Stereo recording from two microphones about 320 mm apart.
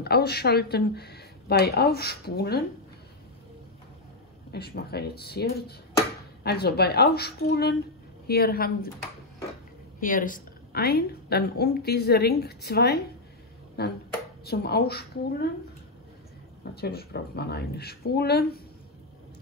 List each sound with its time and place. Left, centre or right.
0.0 s a woman's voice: left
4.5 s a woman's voice: left
9.9 s a woman's voice: left
16.7 s a woman's voice: left